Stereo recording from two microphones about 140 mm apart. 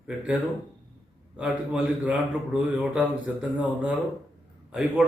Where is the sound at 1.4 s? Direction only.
5° right (ahead or behind).